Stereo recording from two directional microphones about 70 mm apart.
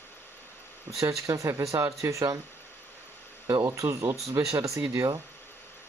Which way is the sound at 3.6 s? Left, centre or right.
Right.